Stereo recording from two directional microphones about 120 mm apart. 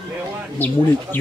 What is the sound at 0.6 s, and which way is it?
Speech, 15° left (ahead or behind).